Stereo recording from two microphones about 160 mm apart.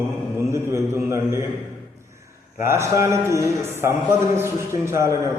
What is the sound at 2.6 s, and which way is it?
A man's voice, 15° right (ahead or behind).